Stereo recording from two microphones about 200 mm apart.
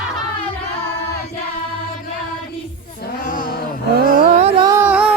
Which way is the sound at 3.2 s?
40° left (ahead or behind).